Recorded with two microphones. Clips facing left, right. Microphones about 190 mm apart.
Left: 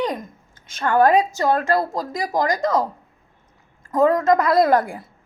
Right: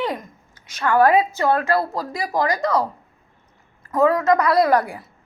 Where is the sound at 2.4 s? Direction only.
45° left (ahead or behind).